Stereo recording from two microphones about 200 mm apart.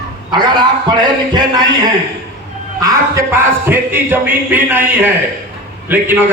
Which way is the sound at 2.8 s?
15° right (ahead or behind).